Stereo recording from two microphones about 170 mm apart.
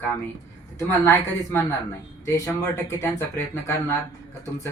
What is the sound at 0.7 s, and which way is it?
Speech, 15° left (ahead or behind).